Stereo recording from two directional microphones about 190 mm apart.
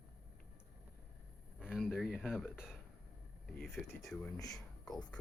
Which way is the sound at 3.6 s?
Centre (ahead or behind).